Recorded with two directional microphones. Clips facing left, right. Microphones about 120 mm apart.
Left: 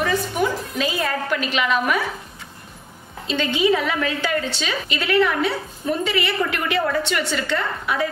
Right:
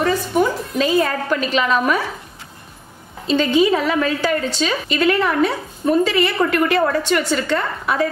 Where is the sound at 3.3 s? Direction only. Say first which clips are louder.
Right 4 dB; 40° right (ahead or behind).